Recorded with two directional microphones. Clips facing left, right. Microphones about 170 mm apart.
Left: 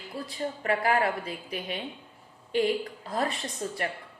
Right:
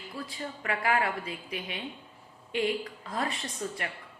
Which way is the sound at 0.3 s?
40° left (ahead or behind).